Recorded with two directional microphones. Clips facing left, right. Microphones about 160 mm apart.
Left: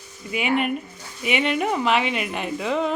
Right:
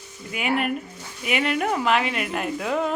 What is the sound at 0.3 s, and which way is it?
A man's voice, centre (ahead or behind).